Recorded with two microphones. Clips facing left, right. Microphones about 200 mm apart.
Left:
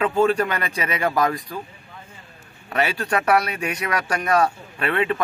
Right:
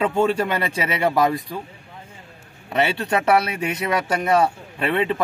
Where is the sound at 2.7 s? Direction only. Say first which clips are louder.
Right 2 dB; 25° right (ahead or behind).